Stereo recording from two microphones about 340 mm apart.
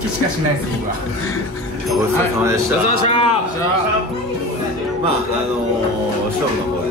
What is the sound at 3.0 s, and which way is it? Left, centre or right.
Speech, centre.